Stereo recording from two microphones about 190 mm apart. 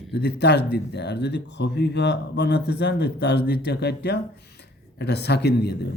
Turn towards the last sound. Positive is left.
turn(degrees=60)  # may be behind; listen again after turning